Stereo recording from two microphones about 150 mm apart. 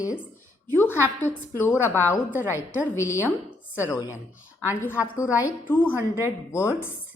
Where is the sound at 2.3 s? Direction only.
15° right (ahead or behind).